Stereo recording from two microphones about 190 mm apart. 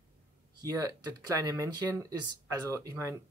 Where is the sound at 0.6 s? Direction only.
15° right (ahead or behind).